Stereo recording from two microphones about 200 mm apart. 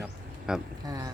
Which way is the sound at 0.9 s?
20° right (ahead or behind).